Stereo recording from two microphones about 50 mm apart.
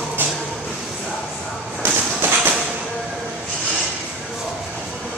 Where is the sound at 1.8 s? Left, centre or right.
Right.